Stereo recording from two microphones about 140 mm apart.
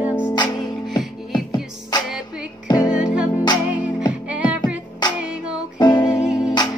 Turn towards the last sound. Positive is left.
turn(degrees=-5)  # may be behind; listen again after turning